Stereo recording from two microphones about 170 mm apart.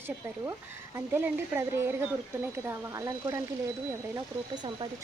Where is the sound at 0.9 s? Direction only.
15° right (ahead or behind).